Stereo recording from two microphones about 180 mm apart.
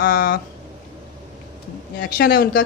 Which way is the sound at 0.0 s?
50° left (ahead or behind).